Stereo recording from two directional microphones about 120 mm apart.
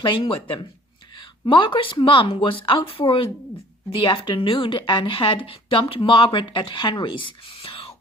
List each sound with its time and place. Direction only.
0.0 s a woman's voice: 45° left (ahead or behind)